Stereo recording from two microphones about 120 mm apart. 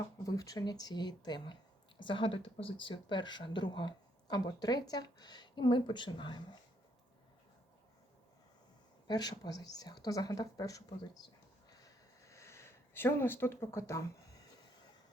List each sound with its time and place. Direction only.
0.3 s speech: 30° left (ahead or behind)
9.0 s speech: 35° left (ahead or behind)
11.7 s a sound: 30° left (ahead or behind)